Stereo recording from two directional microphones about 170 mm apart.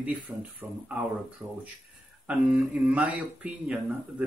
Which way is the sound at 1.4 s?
10° right (ahead or behind).